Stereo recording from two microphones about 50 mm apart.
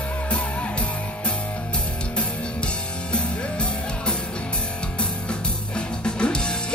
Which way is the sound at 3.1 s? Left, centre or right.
Left.